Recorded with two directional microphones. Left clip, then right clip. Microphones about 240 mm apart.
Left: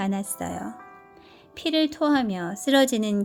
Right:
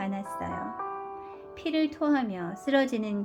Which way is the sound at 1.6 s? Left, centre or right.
Left.